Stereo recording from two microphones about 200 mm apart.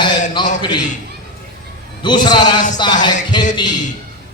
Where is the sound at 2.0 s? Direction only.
20° left (ahead or behind).